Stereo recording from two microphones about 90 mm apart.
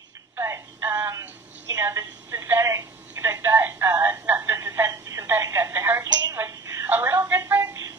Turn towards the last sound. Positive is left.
turn(degrees=-25)  # may be behind; listen again after turning